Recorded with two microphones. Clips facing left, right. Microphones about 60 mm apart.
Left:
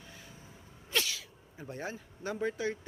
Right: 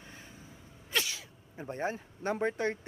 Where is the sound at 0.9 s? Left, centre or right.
Right.